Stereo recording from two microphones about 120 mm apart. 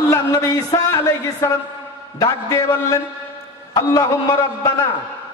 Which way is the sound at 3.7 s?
30° left (ahead or behind).